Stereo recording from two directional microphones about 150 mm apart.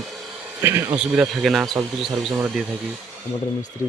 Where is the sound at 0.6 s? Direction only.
15° right (ahead or behind).